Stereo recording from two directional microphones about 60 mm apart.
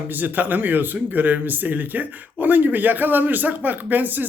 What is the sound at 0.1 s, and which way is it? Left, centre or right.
A man's voice, right.